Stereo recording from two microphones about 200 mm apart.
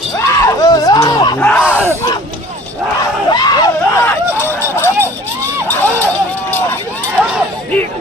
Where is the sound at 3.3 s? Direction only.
20° left (ahead or behind).